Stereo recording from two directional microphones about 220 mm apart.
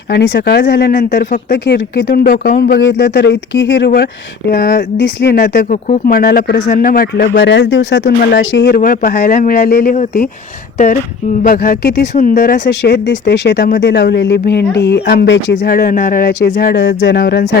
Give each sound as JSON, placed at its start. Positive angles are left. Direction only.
{"t": 0.1, "sound": "speech", "side_deg": 50}
{"t": 11.4, "sound": "speech", "side_deg": 40}
{"t": 12.1, "sound": "speech", "side_deg": 35}